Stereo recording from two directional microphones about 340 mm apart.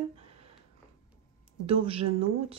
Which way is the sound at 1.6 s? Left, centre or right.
Centre.